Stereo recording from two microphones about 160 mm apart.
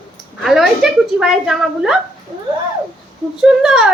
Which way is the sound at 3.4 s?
5° right (ahead or behind).